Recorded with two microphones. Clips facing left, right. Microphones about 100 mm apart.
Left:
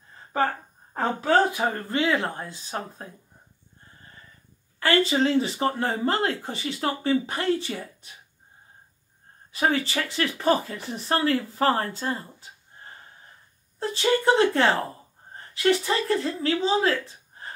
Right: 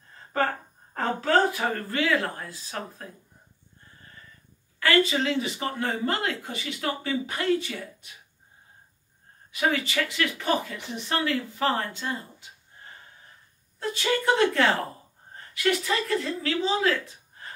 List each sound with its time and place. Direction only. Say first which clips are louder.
0.9 s speech: left 2 dB; 15° left (ahead or behind)
4.7 s speech: left 1 dB; 30° left (ahead or behind)
9.5 s a woman's voice: left 2 dB; 35° left (ahead or behind)